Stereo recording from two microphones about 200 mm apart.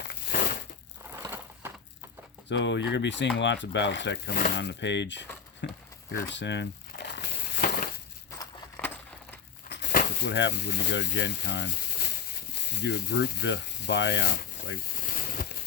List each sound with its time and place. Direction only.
0.1 s crumpling: 45° left (ahead or behind)
1.1 s crushing: 10° right (ahead or behind)
2.5 s speech: 60° left (ahead or behind)
6.3 s a sound: 60° left (ahead or behind)
8.4 s a sound: 10° left (ahead or behind)
9.6 s speech: 55° left (ahead or behind)